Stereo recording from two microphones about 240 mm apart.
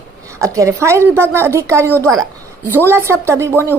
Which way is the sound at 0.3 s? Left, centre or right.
Centre.